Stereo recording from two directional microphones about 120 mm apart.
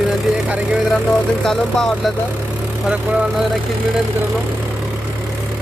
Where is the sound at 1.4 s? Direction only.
5° left (ahead or behind).